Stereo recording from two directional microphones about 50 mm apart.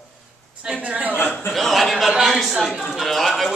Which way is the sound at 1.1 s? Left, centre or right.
Left.